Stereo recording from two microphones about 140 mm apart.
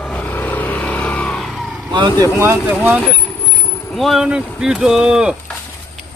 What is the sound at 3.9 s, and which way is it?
Speech, centre (ahead or behind).